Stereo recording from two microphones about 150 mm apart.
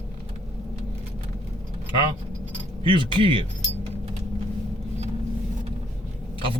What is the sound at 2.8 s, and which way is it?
Speech, 35° right (ahead or behind).